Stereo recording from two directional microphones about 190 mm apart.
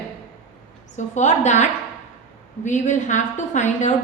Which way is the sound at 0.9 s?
40° left (ahead or behind).